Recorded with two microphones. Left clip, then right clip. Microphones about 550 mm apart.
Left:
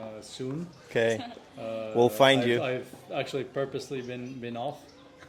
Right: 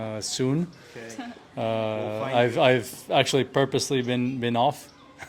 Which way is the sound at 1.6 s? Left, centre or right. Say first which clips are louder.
Left 1 dB; right.